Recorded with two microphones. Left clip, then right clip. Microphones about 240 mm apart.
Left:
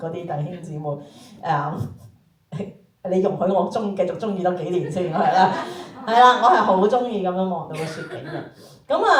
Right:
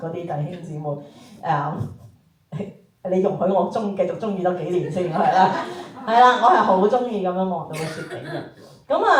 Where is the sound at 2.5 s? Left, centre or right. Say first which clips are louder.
Even; centre.